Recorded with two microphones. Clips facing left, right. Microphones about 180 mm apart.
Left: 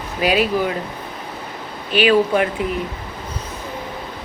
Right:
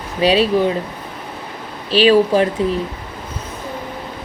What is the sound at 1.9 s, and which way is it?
Speech, 30° right (ahead or behind).